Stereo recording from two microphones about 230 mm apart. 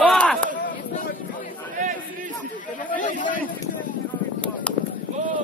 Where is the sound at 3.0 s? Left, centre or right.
Left.